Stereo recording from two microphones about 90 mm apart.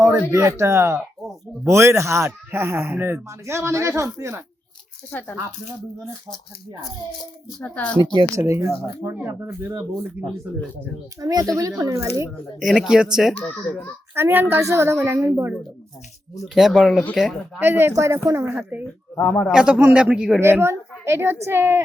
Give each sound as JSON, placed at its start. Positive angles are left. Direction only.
{"t": 0.0, "sound": "speech", "side_deg": -35}
{"t": 7.6, "sound": "a child's voice", "side_deg": 15}
{"t": 8.0, "sound": "speech", "side_deg": -50}
{"t": 8.4, "sound": "a woman's voice", "side_deg": -35}
{"t": 11.2, "sound": "speech", "side_deg": -40}
{"t": 12.5, "sound": "speech", "side_deg": -5}
{"t": 13.4, "sound": "a child's voice", "side_deg": 15}
{"t": 14.2, "sound": "a woman's voice", "side_deg": -25}
{"t": 16.6, "sound": "speech", "side_deg": -5}
{"t": 17.6, "sound": "a woman's voice", "side_deg": -25}
{"t": 18.4, "sound": "a woman's voice", "side_deg": -20}
{"t": 19.1, "sound": "a man's voice", "side_deg": 20}
{"t": 19.5, "sound": "a man's voice", "side_deg": -10}
{"t": 20.4, "sound": "a woman's voice", "side_deg": -30}